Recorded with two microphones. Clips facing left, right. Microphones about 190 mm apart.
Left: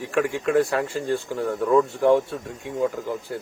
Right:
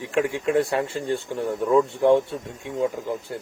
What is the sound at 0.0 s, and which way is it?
A man's voice, 20° right (ahead or behind).